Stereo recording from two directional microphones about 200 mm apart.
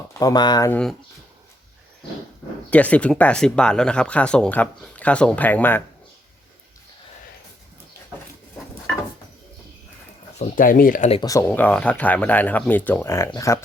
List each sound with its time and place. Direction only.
0.1 s speech: 20° left (ahead or behind)
0.7 s speech: 5° left (ahead or behind)
2.6 s speech: 5° left (ahead or behind)
10.3 s speech: 40° left (ahead or behind)
11.1 s speech: 20° left (ahead or behind)